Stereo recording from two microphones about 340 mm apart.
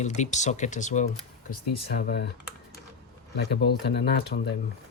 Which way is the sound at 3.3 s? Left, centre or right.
Left.